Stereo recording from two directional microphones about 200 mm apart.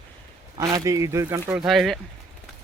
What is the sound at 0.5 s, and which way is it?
Speech, 20° right (ahead or behind).